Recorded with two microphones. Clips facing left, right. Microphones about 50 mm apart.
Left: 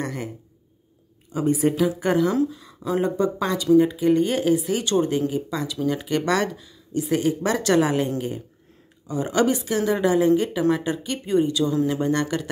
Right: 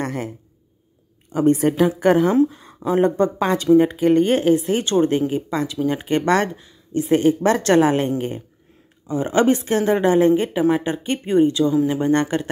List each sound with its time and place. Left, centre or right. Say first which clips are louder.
0.0 s a sound: right 4 dB; right
1.3 s speech: right 4 dB; right
2.5 s speech: right 5 dB; right
9.0 s speech: right 4 dB; right